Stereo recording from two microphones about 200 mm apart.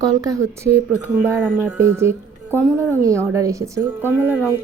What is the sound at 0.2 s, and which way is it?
A woman's voice, 15° right (ahead or behind).